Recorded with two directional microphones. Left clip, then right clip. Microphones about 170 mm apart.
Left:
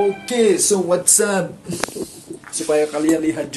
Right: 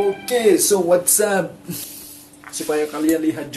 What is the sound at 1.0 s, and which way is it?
Speech, centre (ahead or behind).